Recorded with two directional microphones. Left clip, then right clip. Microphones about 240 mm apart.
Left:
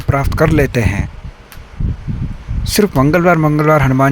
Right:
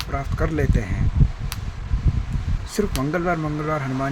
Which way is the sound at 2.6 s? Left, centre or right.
Left.